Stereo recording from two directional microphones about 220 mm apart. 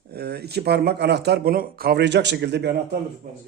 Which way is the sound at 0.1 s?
45° right (ahead or behind).